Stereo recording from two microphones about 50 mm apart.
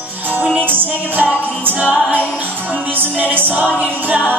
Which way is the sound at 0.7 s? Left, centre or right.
Right.